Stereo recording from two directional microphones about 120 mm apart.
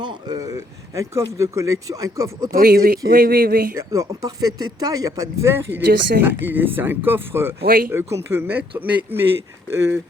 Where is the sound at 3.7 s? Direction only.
25° right (ahead or behind).